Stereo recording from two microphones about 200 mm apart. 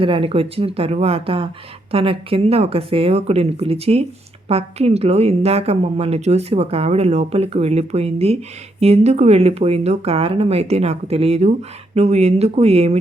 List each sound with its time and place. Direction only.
0.0 s a woman's voice: 25° right (ahead or behind)